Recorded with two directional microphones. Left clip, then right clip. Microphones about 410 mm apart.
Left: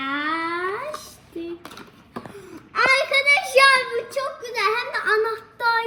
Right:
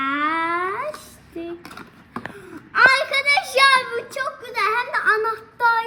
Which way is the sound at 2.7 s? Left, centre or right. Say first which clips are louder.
Right 3 dB; centre.